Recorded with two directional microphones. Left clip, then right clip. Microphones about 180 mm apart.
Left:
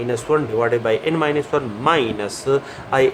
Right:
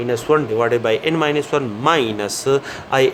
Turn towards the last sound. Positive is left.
turn(degrees=-45)  # may be behind; listen again after turning